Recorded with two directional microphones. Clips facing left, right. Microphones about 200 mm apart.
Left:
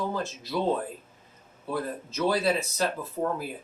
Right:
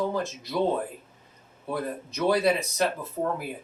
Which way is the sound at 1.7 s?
15° right (ahead or behind).